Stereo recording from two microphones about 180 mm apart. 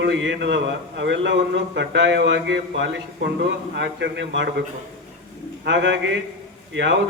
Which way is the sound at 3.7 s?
80° right.